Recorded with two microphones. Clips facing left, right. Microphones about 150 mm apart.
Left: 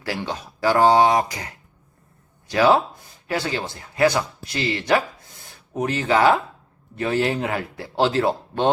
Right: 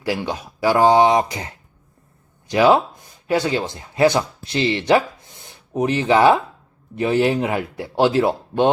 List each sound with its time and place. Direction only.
0.0 s speech: 15° right (ahead or behind)